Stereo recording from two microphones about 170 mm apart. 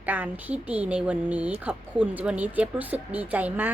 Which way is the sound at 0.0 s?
10° right (ahead or behind).